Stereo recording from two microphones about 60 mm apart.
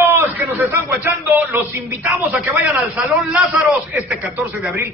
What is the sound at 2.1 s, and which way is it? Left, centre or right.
Speech, right.